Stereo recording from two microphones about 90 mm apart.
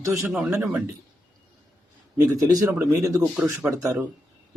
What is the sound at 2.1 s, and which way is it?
A man's voice, 40° right (ahead or behind).